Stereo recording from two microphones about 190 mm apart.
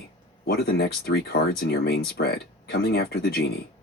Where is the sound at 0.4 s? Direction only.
55° left (ahead or behind).